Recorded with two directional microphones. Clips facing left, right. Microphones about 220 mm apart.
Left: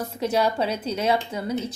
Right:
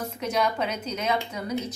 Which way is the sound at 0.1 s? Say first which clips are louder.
Left 5 dB; 30° left (ahead or behind).